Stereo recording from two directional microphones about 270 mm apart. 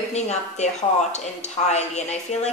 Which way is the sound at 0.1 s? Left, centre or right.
Left.